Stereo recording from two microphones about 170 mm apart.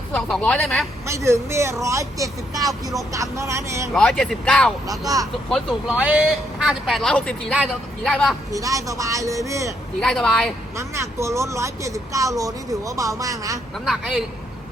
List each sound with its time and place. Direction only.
0.1 s speech: 5° left (ahead or behind)
1.0 s speech: 15° right (ahead or behind)
3.9 s speech: 5° left (ahead or behind)
4.9 s speech: 20° right (ahead or behind)
5.5 s speech: centre (ahead or behind)
8.5 s speech: 20° right (ahead or behind)
10.0 s speech: 5° left (ahead or behind)
10.8 s speech: 15° right (ahead or behind)
13.7 s speech: centre (ahead or behind)